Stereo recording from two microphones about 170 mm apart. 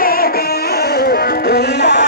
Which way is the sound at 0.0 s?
60° left (ahead or behind).